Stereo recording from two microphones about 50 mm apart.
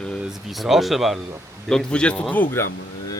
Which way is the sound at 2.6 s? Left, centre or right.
Left.